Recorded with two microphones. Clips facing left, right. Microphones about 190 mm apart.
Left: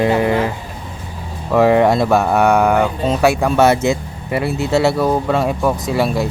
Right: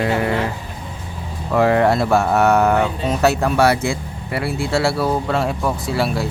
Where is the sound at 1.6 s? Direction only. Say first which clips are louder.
Left 3 dB; 20° left (ahead or behind).